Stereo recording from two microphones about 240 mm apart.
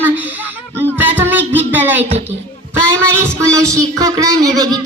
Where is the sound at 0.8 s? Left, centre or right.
Centre.